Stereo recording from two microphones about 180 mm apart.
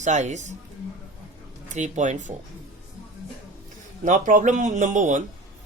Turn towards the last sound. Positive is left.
turn(degrees=-45)  # may be behind; listen again after turning